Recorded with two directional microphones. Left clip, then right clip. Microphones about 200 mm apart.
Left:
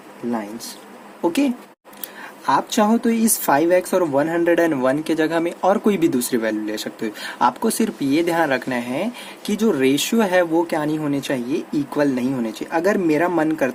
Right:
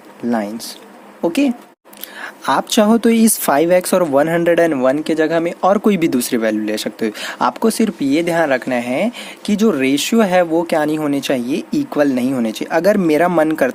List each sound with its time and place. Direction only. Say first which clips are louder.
1.2 s speech: right 3 dB; 30° right (ahead or behind)